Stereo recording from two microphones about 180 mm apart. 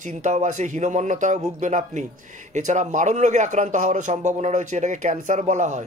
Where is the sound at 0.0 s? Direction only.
45° right (ahead or behind).